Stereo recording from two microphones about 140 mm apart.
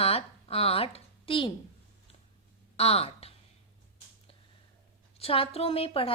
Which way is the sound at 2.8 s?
45° left (ahead or behind).